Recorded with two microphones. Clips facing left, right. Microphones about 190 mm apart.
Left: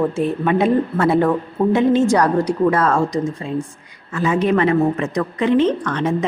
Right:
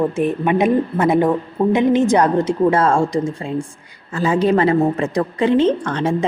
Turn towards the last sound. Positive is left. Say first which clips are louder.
# right 1 dB
turn(degrees=-30)  # may be behind; listen again after turning